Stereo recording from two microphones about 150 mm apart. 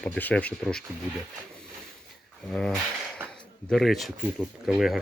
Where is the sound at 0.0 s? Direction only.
10° left (ahead or behind).